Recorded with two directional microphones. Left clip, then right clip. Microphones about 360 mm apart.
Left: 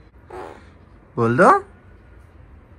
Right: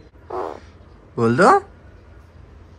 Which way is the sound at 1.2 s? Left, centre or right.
Centre.